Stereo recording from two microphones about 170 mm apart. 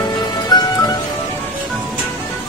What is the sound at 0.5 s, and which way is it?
Music, 25° left (ahead or behind).